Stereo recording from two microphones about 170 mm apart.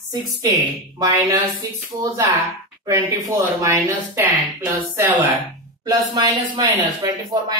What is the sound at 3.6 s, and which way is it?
Speech, 15° right (ahead or behind).